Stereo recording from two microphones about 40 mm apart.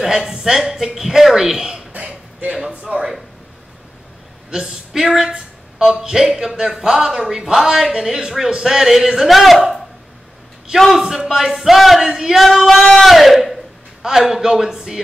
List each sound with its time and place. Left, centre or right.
0.0 s speech: centre
2.0 s a sound: right
2.7 s speech: right
4.5 s speech: centre
10.9 s speech: centre